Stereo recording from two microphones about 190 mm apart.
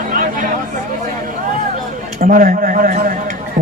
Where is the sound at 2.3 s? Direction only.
45° right (ahead or behind).